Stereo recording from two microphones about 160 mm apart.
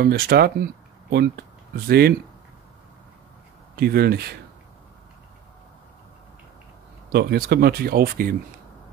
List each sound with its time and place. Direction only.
0.0 s speech: 80° right
3.7 s speech: 80° right
7.1 s speech: 85° right; by 8.4 s 65° right (ahead or behind)